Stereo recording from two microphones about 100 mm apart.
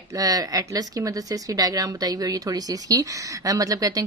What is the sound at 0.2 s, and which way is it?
Speech, 40° right (ahead or behind).